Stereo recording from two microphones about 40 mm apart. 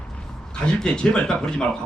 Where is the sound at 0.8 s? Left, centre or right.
Left.